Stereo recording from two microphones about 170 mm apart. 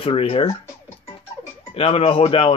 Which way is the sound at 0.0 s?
35° left (ahead or behind).